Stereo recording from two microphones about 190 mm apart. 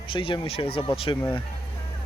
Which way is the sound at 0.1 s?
30° left (ahead or behind).